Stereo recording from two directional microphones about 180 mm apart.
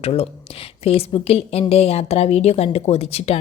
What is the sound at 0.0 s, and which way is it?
A woman's voice, 30° left (ahead or behind).